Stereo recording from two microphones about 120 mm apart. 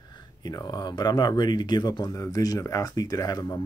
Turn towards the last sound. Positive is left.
turn(degrees=30)  # may be behind; listen again after turning